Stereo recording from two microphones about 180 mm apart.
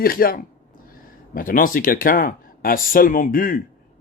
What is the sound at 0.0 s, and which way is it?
Speech, 55° left (ahead or behind).